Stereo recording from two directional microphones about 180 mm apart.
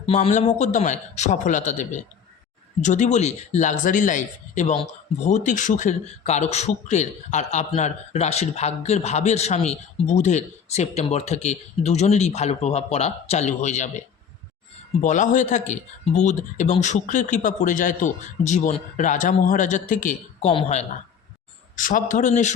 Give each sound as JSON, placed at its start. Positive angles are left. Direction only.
{"t": 0.0, "sound": "a man's voice", "side_deg": 35}
{"t": 15.0, "sound": "a man's voice", "side_deg": 45}
{"t": 20.5, "sound": "speech", "side_deg": 35}
{"t": 21.8, "sound": "a man's voice", "side_deg": 45}